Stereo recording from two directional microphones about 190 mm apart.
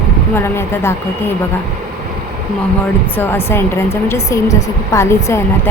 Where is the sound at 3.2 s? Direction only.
10° left (ahead or behind).